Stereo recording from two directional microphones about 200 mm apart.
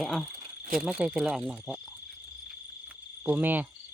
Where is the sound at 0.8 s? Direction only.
5° right (ahead or behind).